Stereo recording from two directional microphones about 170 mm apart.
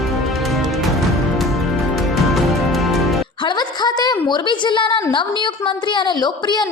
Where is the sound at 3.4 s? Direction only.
25° left (ahead or behind).